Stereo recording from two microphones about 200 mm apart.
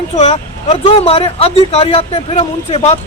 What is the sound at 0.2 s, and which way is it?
A man's voice, 30° left (ahead or behind).